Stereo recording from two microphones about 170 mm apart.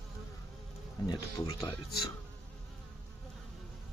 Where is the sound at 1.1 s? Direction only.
25° left (ahead or behind).